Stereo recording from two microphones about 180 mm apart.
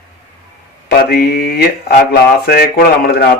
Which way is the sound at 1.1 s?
60° left (ahead or behind).